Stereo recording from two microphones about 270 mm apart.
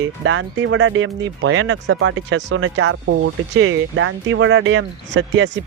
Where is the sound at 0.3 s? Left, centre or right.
Right.